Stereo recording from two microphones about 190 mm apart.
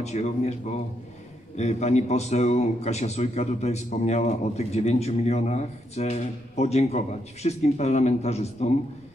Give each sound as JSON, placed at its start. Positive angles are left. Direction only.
{"t": 0.0, "sound": "a man's voice", "side_deg": 35}